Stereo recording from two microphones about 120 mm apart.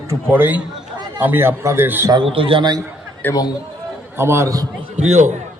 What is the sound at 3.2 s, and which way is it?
Speech, 15° left (ahead or behind).